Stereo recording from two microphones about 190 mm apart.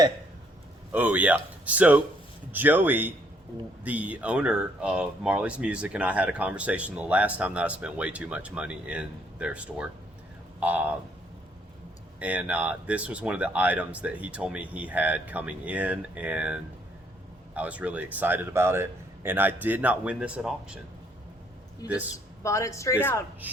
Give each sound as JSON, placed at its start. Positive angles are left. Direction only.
{"t": 0.9, "sound": "speech", "side_deg": -10}
{"t": 12.2, "sound": "speech", "side_deg": -5}
{"t": 22.4, "sound": "speech", "side_deg": 15}
{"t": 23.4, "sound": "speech", "side_deg": -10}